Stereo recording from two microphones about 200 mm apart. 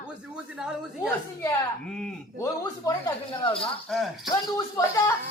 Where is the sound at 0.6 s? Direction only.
5° right (ahead or behind).